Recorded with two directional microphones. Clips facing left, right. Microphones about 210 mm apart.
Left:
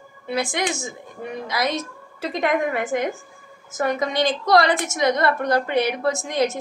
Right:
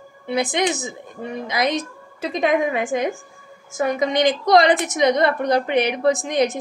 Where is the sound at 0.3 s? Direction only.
20° right (ahead or behind).